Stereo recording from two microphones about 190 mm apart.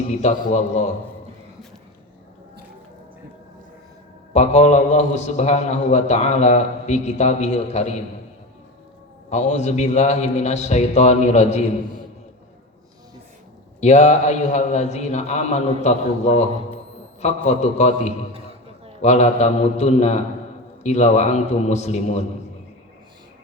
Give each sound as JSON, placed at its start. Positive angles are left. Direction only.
{"t": 0.1, "sound": "a man's voice", "side_deg": 35}
{"t": 4.4, "sound": "a man's voice", "side_deg": 35}
{"t": 9.3, "sound": "a man's voice", "side_deg": 35}
{"t": 13.8, "sound": "a man's voice", "side_deg": 35}